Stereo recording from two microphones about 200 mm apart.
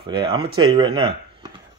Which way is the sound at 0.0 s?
25° right (ahead or behind).